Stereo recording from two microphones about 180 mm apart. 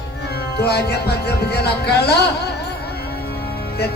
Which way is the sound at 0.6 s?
65° left (ahead or behind).